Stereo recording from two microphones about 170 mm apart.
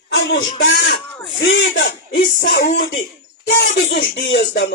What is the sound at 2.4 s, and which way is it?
Speech, 85° left.